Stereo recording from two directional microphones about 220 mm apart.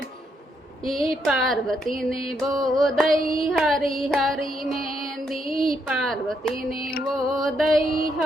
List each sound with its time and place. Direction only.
0.9 s music: centre (ahead or behind)